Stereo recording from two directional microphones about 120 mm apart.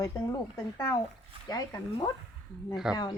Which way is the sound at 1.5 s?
35° left (ahead or behind).